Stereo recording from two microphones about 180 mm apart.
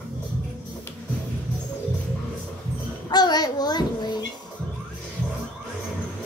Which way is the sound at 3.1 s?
25° left (ahead or behind).